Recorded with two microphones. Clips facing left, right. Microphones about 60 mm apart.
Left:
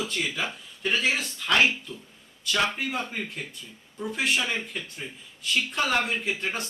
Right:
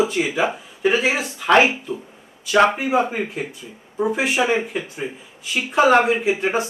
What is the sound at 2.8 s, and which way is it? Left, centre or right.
Speech, centre.